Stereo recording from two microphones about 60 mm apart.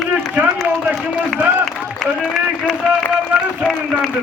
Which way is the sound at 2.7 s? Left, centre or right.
Centre.